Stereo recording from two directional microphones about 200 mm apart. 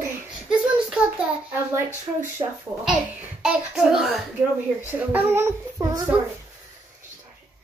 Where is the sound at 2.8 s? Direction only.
5° right (ahead or behind).